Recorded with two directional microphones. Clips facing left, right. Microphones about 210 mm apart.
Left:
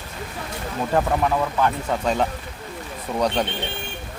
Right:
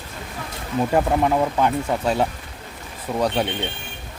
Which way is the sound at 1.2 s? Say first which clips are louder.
Right 2 dB; 20° right (ahead or behind).